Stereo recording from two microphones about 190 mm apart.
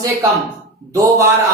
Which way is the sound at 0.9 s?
15° right (ahead or behind).